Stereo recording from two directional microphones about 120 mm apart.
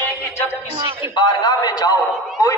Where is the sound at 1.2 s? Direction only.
35° left (ahead or behind).